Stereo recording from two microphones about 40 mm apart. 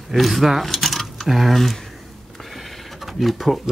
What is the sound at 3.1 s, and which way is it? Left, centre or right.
Speech, centre.